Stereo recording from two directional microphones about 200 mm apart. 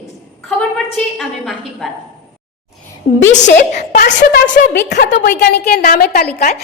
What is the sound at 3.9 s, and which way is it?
A woman's voice, 50° left (ahead or behind).